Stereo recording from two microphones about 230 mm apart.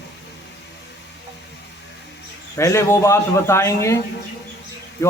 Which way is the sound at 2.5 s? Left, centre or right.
Centre.